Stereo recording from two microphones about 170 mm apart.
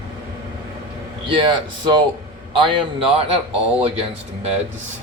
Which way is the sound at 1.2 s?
30° right (ahead or behind).